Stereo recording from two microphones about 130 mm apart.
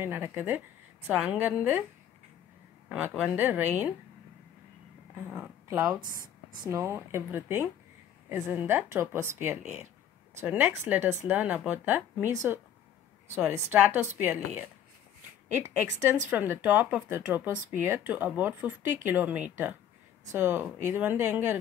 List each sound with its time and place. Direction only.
0.0 s speech: 20° right (ahead or behind)
3.2 s speech: 15° right (ahead or behind)
5.3 s speech: 10° right (ahead or behind)
5.8 s a woman's voice: 25° right (ahead or behind)